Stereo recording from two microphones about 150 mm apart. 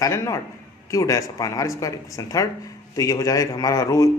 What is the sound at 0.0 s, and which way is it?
A man's voice, 20° left (ahead or behind).